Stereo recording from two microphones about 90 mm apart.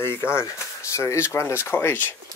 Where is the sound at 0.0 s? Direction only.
25° left (ahead or behind).